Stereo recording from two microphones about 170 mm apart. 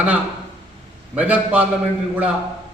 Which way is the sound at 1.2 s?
10° right (ahead or behind).